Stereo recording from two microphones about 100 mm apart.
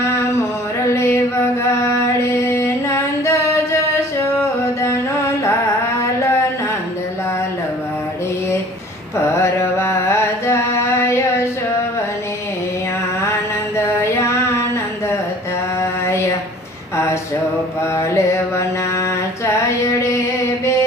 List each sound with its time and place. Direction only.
0.0 s music: 25° left (ahead or behind)
1.9 s a sound: 30° left (ahead or behind)
4.2 s music: 30° left (ahead or behind)
6.0 s a sound: 30° left (ahead or behind)
9.1 s music: 25° left (ahead or behind)
13.7 s music: 30° left (ahead or behind)
17.9 s music: 30° left (ahead or behind)
19.5 s mantra: 30° left (ahead or behind)